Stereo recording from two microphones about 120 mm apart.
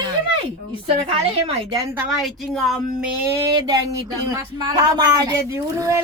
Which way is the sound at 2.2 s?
Centre (ahead or behind).